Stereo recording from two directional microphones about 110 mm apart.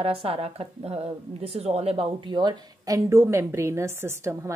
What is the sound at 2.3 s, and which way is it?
A woman's voice, 40° right (ahead or behind).